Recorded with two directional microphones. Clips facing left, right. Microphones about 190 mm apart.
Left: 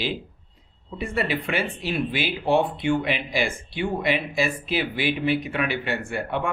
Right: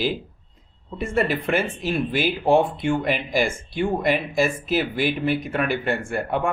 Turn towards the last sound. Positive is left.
turn(degrees=-45)  # may be behind; listen again after turning